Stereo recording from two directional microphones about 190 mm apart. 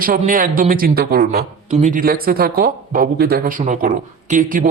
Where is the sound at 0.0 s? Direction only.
45° right (ahead or behind).